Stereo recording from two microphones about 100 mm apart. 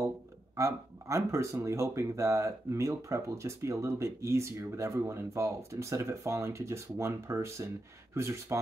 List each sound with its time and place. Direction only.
0.6 s speech: 30° right (ahead or behind)